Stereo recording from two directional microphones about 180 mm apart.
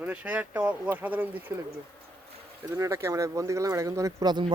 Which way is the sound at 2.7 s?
15° right (ahead or behind).